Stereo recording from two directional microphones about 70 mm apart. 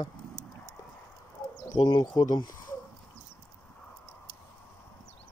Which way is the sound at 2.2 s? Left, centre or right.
Left.